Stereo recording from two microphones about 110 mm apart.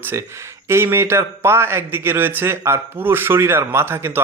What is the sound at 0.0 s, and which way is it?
Speech, 25° right (ahead or behind).